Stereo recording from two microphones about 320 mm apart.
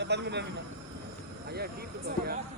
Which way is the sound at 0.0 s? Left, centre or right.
Right.